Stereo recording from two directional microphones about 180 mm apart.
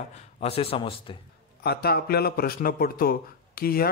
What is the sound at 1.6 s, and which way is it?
Speech, 60° left (ahead or behind).